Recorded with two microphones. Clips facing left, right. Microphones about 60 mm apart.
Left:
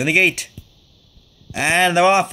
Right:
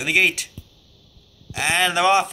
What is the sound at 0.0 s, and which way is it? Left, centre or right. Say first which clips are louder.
Speech: left 3 dB; centre.